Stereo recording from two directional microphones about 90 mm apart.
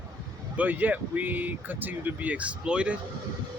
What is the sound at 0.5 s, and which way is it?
Speech, 20° right (ahead or behind).